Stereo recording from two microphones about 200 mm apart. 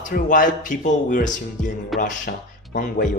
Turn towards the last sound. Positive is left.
turn(degrees=40)  # may be behind; listen again after turning